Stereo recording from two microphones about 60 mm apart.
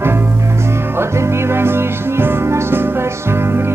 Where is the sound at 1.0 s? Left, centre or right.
Right.